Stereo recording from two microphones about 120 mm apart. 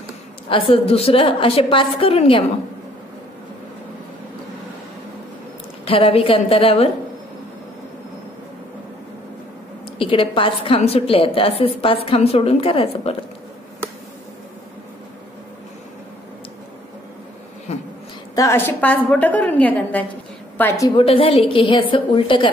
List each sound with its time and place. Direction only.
0.5 s a woman's voice: 50° left (ahead or behind)
5.9 s a woman's voice: 55° left (ahead or behind)
9.9 s a woman's voice: 45° left (ahead or behind)
18.3 s a woman's voice: 25° left (ahead or behind)
20.9 s a woman's voice: 50° left (ahead or behind)